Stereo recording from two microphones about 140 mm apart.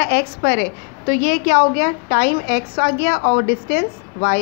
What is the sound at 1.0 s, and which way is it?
A woman's voice, 90° left.